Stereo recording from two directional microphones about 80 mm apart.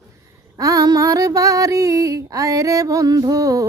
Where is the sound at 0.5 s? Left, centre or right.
Right.